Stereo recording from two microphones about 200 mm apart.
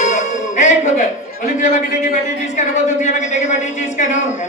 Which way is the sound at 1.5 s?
40° left (ahead or behind).